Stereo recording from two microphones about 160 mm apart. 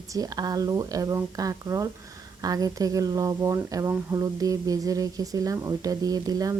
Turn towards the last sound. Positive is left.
turn(degrees=-25)  # may be behind; listen again after turning